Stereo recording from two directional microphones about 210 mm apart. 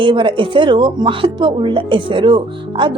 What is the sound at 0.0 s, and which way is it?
Speech, 25° right (ahead or behind).